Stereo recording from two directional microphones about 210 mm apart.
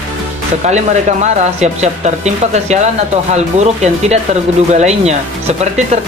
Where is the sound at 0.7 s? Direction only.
35° right (ahead or behind).